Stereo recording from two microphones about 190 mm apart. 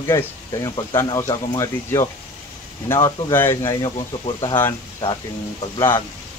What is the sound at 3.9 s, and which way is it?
Speech, 25° left (ahead or behind).